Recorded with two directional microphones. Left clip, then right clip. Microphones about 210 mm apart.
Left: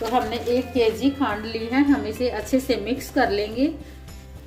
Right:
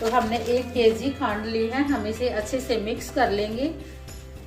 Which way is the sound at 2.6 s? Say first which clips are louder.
Left 2 dB; 50° left (ahead or behind).